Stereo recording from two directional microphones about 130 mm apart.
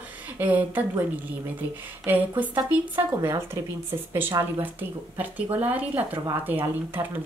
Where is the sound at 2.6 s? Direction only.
15° right (ahead or behind).